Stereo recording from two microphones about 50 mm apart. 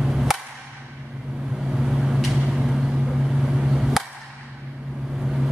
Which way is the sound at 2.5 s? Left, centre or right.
Centre.